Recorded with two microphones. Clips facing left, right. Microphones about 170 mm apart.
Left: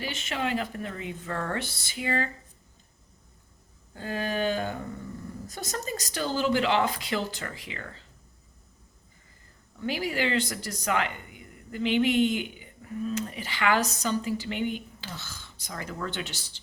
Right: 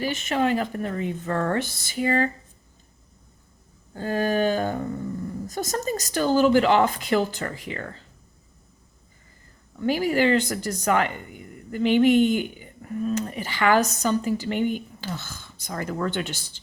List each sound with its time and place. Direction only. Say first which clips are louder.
0.0 s speech: right 8 dB; 45° right (ahead or behind)
3.9 s speech: right 7 dB; 40° right (ahead or behind)
9.8 s speech: right 8 dB; 45° right (ahead or behind)